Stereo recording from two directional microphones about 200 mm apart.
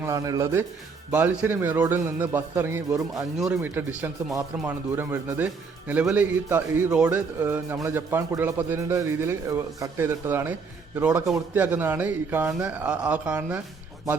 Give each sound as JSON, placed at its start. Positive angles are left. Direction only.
{"t": 0.0, "sound": "speech", "side_deg": -15}
{"t": 3.3, "sound": "speech", "side_deg": -5}